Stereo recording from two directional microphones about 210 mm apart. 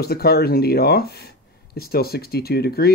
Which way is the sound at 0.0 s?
50° left (ahead or behind).